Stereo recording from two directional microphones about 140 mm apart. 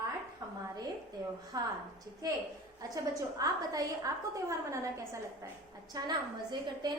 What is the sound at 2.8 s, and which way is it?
A woman's voice, 25° right (ahead or behind).